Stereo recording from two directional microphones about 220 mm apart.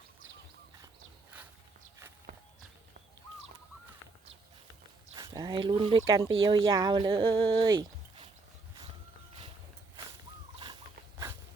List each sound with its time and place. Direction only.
5.1 s speech: 15° right (ahead or behind)